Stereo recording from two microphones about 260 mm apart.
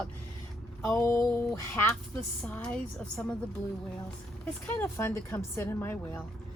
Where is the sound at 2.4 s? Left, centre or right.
Centre.